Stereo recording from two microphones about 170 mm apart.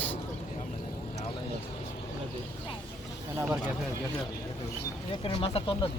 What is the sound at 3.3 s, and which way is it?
Speech, 10° right (ahead or behind).